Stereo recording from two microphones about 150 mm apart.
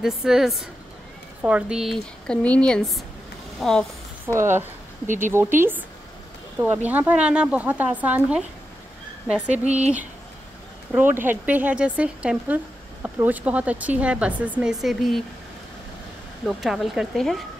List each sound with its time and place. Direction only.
0.0 s speech: 5° right (ahead or behind)
4.3 s speech: 15° right (ahead or behind)
9.8 s speech: 10° right (ahead or behind)
16.4 s speech: centre (ahead or behind)